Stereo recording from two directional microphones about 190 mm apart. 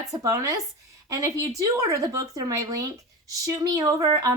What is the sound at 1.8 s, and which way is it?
Speech, 15° right (ahead or behind).